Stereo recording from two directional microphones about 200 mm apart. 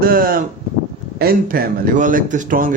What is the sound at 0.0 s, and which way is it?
Speech, 45° right (ahead or behind).